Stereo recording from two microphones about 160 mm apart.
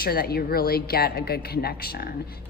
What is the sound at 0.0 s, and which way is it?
A woman's voice, 70° left (ahead or behind).